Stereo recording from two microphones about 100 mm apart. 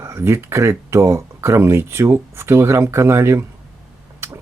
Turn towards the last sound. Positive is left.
turn(degrees=-25)  # may be behind; listen again after turning